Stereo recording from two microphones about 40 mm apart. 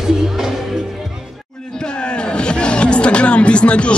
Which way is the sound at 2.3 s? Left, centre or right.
Left.